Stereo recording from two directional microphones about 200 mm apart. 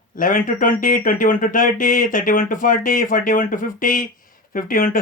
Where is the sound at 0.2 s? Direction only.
45° left (ahead or behind).